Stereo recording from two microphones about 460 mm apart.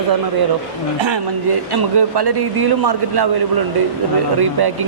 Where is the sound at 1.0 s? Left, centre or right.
Right.